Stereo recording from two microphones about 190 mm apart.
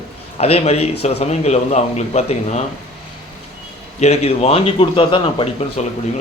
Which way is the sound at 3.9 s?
35° left (ahead or behind).